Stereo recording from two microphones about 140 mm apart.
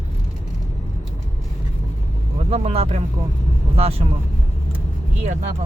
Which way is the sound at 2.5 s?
45° right (ahead or behind).